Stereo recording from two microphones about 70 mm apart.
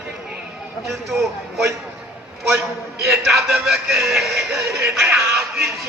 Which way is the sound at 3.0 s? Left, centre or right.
Centre.